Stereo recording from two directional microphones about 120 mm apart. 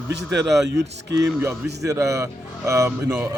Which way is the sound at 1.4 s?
25° right (ahead or behind).